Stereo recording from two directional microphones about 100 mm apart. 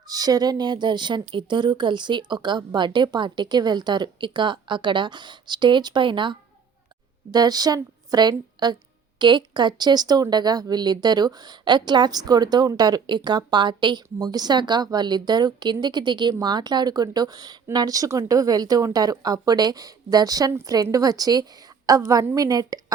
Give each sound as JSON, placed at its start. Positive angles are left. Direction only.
{"t": 0.1, "sound": "speech", "side_deg": -40}
{"t": 7.3, "sound": "speech", "side_deg": -40}